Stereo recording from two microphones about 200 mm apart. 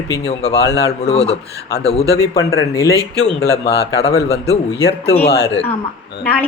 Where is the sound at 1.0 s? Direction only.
30° left (ahead or behind).